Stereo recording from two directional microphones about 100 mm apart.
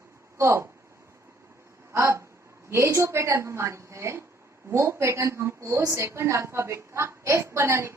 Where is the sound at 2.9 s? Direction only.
30° right (ahead or behind).